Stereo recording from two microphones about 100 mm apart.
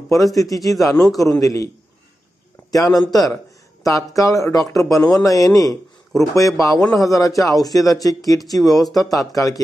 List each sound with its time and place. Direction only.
0.1 s a man's voice: centre (ahead or behind)
0.4 s a man's voice: 35° left (ahead or behind)
2.7 s a man's voice: 35° left (ahead or behind)